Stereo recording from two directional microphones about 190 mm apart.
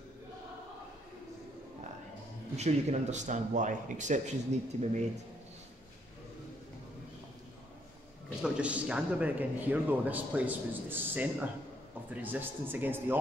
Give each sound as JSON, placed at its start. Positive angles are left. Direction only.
{"t": 2.5, "sound": "speech", "side_deg": -35}
{"t": 8.4, "sound": "a man's voice", "side_deg": -5}